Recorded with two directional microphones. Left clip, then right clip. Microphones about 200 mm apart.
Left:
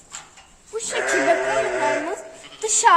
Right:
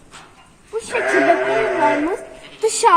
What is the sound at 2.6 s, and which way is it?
Speech, 15° right (ahead or behind).